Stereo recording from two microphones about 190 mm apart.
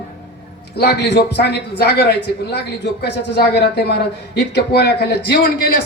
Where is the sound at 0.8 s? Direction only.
60° left (ahead or behind).